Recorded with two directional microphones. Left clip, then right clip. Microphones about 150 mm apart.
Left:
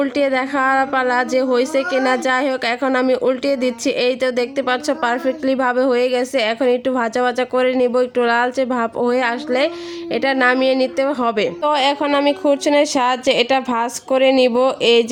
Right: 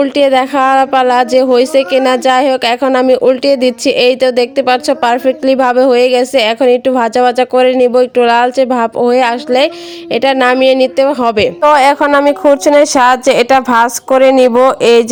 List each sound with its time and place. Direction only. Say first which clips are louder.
0.0 s speech: right 9 dB; 40° right (ahead or behind)